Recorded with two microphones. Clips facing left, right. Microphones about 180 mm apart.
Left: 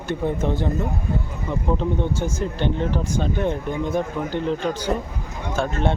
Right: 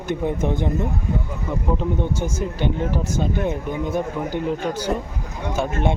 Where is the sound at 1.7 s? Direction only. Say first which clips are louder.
Even; 10° right (ahead or behind).